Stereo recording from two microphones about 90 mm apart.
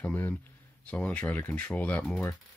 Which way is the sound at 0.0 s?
20° left (ahead or behind).